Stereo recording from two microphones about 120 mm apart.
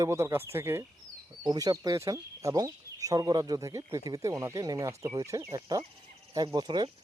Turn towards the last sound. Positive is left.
turn(degrees=-35)  # may be behind; listen again after turning